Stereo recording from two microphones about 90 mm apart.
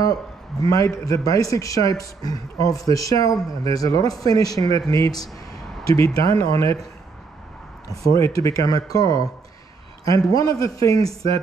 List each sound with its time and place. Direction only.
0.0 s a man's voice: 40° left (ahead or behind)
5.9 s a man's voice: 30° left (ahead or behind)
8.0 s a man's voice: 35° left (ahead or behind)